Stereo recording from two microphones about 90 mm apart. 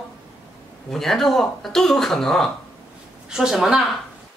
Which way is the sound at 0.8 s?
5° left (ahead or behind).